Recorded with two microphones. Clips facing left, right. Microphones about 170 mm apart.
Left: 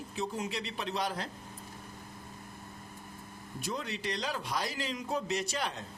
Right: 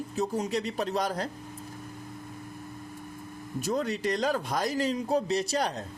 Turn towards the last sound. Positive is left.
turn(degrees=-40)  # may be behind; listen again after turning